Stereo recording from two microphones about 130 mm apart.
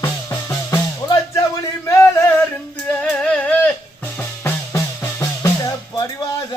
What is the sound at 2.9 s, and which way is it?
Music, 10° left (ahead or behind).